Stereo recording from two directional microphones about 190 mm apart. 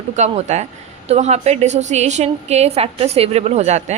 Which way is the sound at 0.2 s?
35° right (ahead or behind).